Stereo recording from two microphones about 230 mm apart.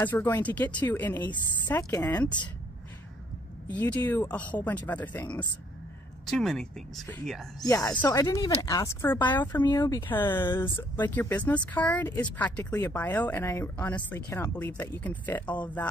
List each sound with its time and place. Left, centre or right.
0.0 s speech: centre
3.7 s speech: centre
7.6 s speech: centre